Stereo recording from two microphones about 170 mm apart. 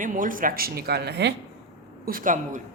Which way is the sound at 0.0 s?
50° right (ahead or behind).